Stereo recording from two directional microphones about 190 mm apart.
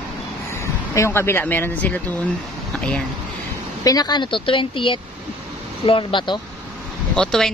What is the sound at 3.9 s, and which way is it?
A woman's voice, 20° left (ahead or behind).